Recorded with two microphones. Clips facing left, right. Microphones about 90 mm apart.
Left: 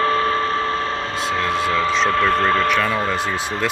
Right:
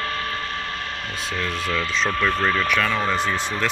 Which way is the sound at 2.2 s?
40° left (ahead or behind).